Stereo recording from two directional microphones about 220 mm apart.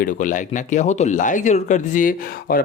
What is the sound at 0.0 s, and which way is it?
Speech, 35° left (ahead or behind).